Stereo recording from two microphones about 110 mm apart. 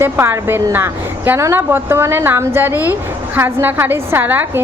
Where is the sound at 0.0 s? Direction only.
20° right (ahead or behind).